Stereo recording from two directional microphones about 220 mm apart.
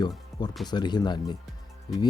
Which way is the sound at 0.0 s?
20° left (ahead or behind).